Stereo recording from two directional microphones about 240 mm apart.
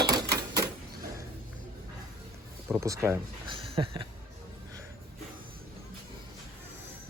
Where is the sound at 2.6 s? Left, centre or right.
Centre.